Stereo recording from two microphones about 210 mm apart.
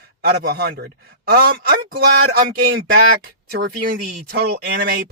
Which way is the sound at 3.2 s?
45° right (ahead or behind).